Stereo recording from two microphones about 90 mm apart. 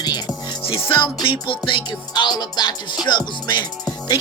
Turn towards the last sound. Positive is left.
turn(degrees=55)  # may be behind; listen again after turning